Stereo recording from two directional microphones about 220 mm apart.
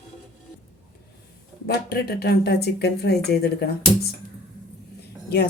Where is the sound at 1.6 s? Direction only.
45° left (ahead or behind).